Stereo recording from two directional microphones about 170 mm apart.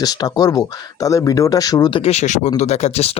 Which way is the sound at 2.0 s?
40° left (ahead or behind).